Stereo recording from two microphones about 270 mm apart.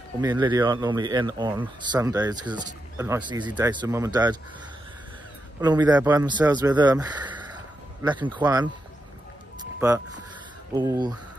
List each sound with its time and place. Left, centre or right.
0.2 s speech: centre
5.6 s speech: centre
9.8 s speech: centre